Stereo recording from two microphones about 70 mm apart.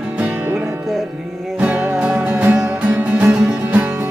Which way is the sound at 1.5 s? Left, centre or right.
Right.